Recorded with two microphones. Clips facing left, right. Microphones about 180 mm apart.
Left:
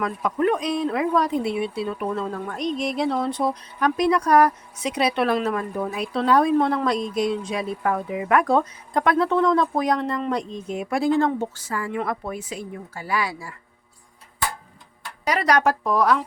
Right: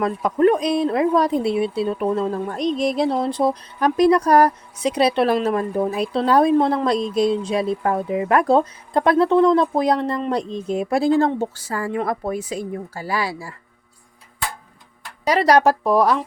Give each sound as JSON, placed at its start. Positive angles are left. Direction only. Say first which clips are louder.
{"t": 0.0, "sound": "speech", "louder": "right 5 dB", "side_deg": -35}
{"t": 15.3, "sound": "speech", "louder": "right 5 dB", "side_deg": -35}